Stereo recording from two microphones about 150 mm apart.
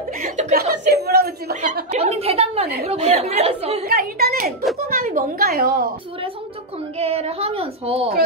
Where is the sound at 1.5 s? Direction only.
55° right (ahead or behind).